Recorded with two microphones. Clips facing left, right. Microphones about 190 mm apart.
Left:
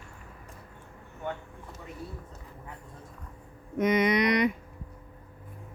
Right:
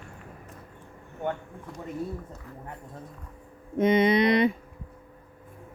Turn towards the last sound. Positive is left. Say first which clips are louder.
# right 3 dB
turn(degrees=-30)  # may be behind; listen again after turning